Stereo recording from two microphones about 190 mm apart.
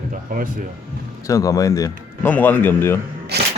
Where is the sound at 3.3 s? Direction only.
60° right (ahead or behind).